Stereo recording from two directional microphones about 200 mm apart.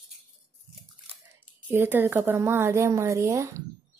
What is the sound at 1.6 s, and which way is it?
A woman's voice, 10° right (ahead or behind).